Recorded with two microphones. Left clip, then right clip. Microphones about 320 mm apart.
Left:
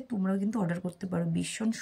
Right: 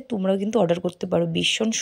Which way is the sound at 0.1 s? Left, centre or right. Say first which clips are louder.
Right 11 dB; right.